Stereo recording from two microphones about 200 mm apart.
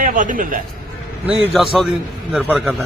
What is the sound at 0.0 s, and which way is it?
Speech, 40° right (ahead or behind).